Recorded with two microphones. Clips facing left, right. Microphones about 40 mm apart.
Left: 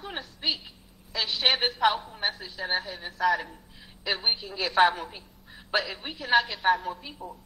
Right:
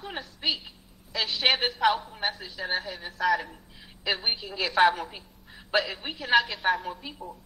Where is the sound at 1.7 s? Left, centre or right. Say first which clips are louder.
Even; right.